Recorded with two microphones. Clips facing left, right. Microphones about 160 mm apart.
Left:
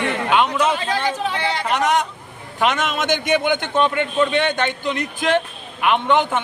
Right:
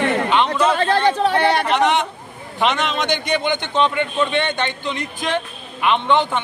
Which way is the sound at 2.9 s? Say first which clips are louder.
Left 1 dB; 5° left (ahead or behind).